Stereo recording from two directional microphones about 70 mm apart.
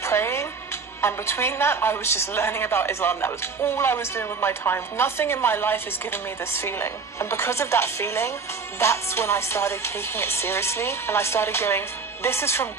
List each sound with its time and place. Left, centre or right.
0.0 s a woman's voice: left